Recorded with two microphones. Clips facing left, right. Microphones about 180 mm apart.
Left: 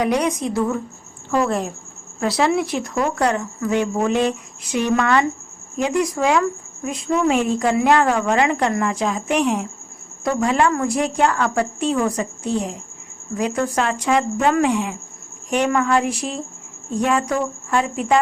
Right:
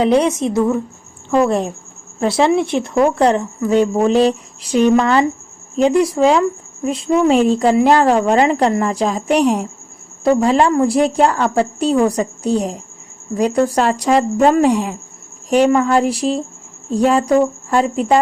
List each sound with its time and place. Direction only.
0.0 s speech: 25° right (ahead or behind)